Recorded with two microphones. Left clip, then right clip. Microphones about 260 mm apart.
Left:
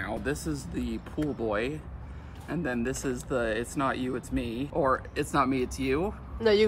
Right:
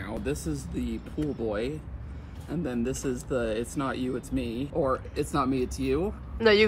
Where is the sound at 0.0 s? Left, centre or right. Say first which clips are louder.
Left 1 dB; centre.